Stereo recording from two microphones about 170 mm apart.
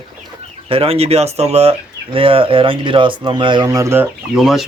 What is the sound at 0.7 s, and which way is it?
Speech, 35° right (ahead or behind).